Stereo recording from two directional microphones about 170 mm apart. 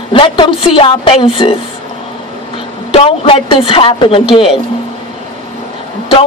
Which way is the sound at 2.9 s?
35° left (ahead or behind).